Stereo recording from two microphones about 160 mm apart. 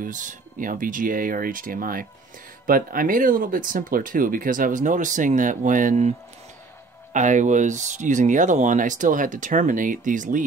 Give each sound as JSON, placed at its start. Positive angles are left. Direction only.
{"t": 0.0, "sound": "speech", "side_deg": -55}